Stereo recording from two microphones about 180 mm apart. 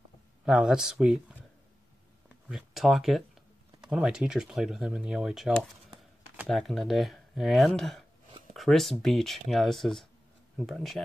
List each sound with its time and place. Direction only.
0.5 s speech: 5° right (ahead or behind)
2.5 s speech: centre (ahead or behind)